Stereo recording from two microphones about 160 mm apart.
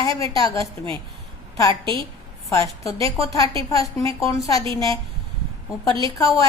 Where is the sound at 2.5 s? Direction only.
20° left (ahead or behind).